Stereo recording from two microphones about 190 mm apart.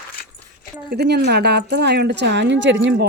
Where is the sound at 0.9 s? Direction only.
60° right (ahead or behind).